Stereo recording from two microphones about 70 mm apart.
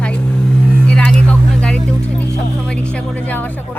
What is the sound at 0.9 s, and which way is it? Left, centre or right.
Music, centre.